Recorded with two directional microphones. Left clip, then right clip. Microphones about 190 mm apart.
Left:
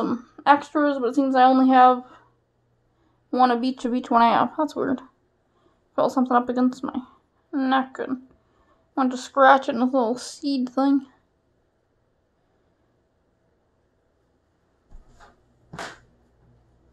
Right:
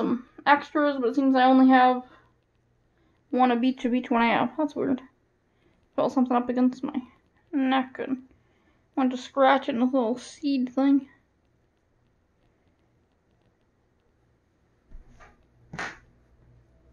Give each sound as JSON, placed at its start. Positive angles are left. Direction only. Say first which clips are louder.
{"t": 0.0, "sound": "a sound", "louder": "left 2 dB", "side_deg": 20}
{"t": 0.7, "sound": "speech", "louder": "left 3 dB", "side_deg": 20}
{"t": 3.3, "sound": "a woman's voice", "louder": "left 3 dB", "side_deg": 10}
{"t": 6.1, "sound": "a woman's voice", "louder": "left 4 dB", "side_deg": 15}